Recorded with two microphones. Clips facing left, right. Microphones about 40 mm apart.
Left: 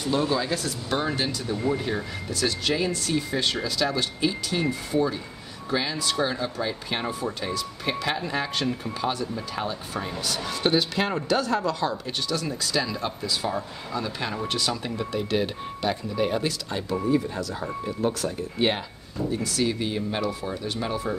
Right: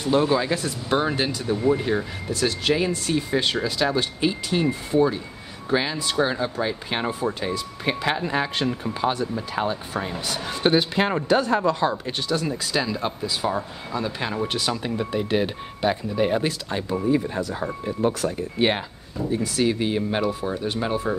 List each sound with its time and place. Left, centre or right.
0.1 s speech: right
12.4 s speech: centre
19.1 s speech: right